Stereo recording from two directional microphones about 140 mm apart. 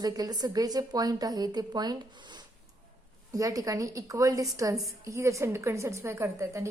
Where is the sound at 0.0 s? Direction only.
25° right (ahead or behind).